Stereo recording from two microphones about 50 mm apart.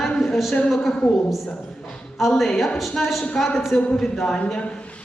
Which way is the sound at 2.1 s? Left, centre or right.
Centre.